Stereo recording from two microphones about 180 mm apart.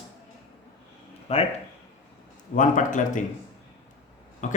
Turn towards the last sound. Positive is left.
turn(degrees=45)  # may be behind; listen again after turning